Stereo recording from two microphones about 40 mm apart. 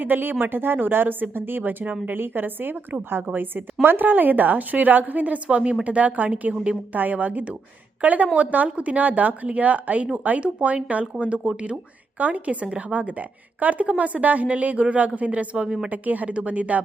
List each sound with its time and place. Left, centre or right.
0.0 s speech: right
1.8 s a woman's voice: right
2.1 s speech: right
4.1 s a woman's voice: right
15.9 s a woman's voice: right